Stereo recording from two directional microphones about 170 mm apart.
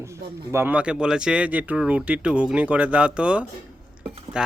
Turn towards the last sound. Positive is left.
turn(degrees=-5)  # may be behind; listen again after turning